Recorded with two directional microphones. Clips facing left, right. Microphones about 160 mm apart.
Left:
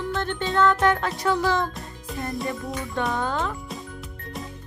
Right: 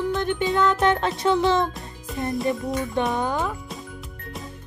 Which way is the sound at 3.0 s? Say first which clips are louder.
Right 2 dB; 20° right (ahead or behind).